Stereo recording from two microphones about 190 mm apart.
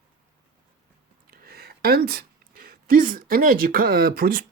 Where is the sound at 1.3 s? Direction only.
55° right (ahead or behind).